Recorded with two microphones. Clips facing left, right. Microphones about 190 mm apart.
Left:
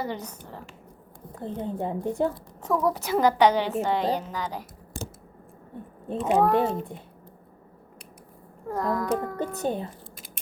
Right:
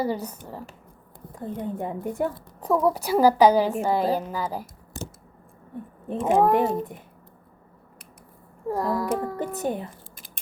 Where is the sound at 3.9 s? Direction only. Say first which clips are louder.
Right 2 dB; 5° right (ahead or behind).